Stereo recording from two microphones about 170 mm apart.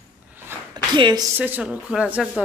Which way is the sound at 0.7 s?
25° right (ahead or behind).